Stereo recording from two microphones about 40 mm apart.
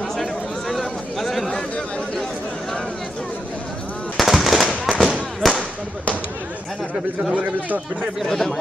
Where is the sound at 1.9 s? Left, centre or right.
Left.